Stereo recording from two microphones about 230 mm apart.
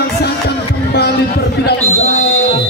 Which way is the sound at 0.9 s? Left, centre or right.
Left.